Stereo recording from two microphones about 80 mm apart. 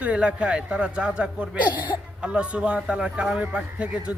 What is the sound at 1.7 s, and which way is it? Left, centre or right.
Speech, left.